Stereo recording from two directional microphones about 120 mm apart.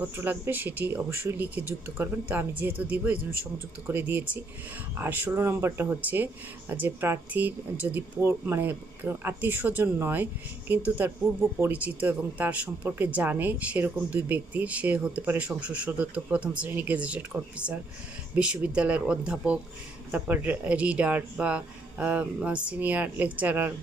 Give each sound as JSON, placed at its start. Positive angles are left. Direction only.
{"t": 0.0, "sound": "speech", "side_deg": -15}